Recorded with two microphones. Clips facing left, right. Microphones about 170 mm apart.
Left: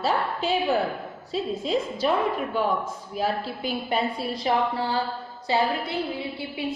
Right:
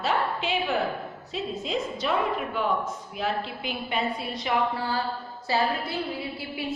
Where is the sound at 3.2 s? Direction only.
35° left (ahead or behind).